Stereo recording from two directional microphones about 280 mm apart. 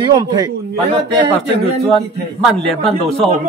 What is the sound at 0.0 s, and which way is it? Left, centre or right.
Speech, centre.